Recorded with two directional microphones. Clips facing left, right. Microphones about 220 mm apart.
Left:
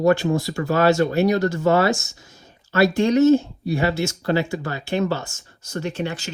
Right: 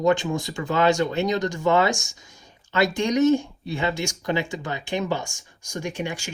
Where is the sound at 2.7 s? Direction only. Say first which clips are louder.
Left 5 dB; 20° right (ahead or behind).